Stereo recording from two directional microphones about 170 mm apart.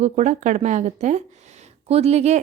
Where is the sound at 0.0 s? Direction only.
45° right (ahead or behind).